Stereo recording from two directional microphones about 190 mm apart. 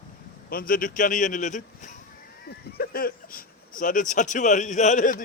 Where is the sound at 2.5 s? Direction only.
55° left (ahead or behind).